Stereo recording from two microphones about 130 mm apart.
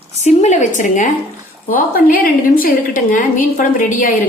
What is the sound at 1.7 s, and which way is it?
A woman's voice, 90° left.